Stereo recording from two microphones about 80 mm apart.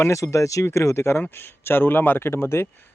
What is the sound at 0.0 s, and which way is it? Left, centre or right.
Speech, left.